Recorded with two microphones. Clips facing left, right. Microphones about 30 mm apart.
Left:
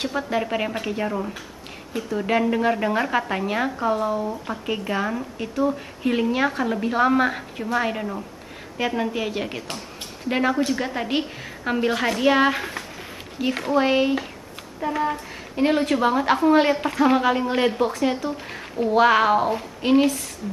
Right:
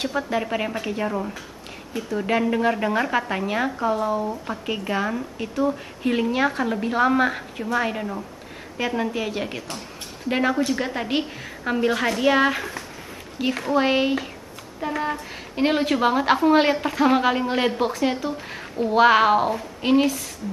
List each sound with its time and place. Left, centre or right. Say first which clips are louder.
0.0 s speech: even; centre
13.4 s speech: even; centre
15.5 s speech: left 1 dB; centre
16.7 s speech: even; centre
18.5 s speech: left 2 dB; centre
18.9 s speech: right 1 dB; centre
19.8 s speech: left 1 dB; centre